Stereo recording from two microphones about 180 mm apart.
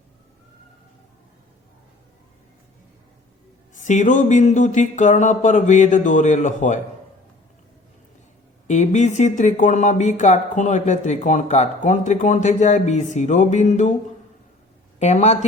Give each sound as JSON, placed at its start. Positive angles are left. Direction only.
{"t": 3.8, "sound": "speech", "side_deg": 45}
{"t": 8.6, "sound": "speech", "side_deg": 40}
{"t": 14.9, "sound": "speech", "side_deg": 40}